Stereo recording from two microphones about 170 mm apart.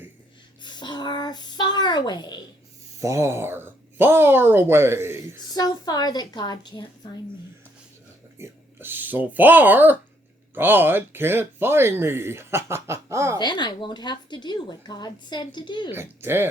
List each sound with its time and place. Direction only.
0.6 s a sound: 25° left (ahead or behind)
3.0 s speech: 15° right (ahead or behind)
5.5 s a woman's voice: 25° left (ahead or behind)
8.4 s speech: 10° right (ahead or behind)
13.4 s a woman's voice: 25° left (ahead or behind)
15.9 s speech: 15° right (ahead or behind)